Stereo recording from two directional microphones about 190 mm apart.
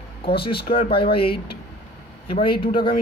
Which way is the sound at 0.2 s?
30° left (ahead or behind).